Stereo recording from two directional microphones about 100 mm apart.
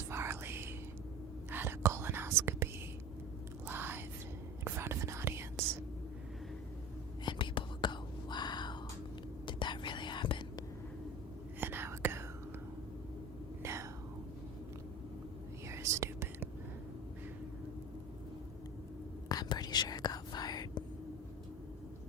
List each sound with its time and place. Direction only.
0.1 s whispering: 25° right (ahead or behind)
3.7 s whispering: 20° right (ahead or behind)
7.3 s whispering: 55° left (ahead or behind)
11.6 s whispering: 20° right (ahead or behind)
13.6 s whispering: 25° right (ahead or behind)
15.7 s whispering: 30° right (ahead or behind)
19.3 s whispering: 40° left (ahead or behind)